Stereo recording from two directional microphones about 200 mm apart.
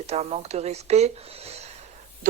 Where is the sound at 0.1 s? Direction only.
30° right (ahead or behind).